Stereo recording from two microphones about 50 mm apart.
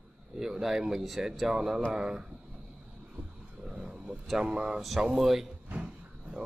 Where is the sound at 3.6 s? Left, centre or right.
Centre.